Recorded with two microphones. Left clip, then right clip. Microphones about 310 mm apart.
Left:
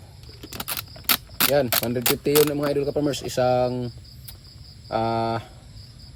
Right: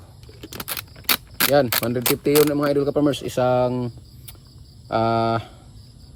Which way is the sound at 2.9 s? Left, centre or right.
Centre.